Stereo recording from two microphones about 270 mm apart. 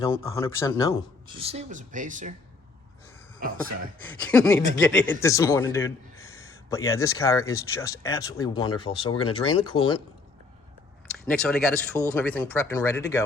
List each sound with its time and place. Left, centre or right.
0.0 s speech: centre
1.3 s speech: right
4.0 s a man's voice: centre
11.3 s speech: centre